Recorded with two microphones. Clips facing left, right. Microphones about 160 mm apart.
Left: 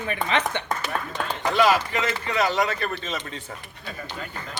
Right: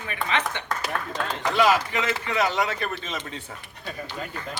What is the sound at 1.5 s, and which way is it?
A man's voice, 15° right (ahead or behind).